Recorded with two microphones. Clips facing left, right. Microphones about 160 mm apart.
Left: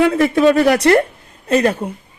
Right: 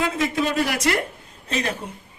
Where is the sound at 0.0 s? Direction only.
65° left (ahead or behind).